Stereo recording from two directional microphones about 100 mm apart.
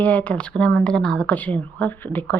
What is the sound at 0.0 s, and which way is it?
Speech, 15° left (ahead or behind).